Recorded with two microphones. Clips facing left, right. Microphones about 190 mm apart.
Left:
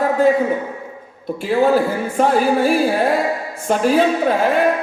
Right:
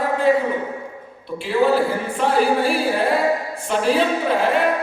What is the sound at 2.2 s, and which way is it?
Music, 45° left (ahead or behind).